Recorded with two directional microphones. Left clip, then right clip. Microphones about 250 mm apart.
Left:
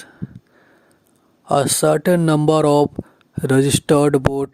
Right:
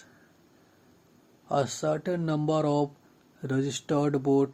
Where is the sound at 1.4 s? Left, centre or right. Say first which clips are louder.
Left 12 dB; left.